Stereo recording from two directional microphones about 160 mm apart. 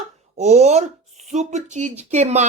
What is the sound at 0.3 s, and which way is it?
Speech, 45° right (ahead or behind).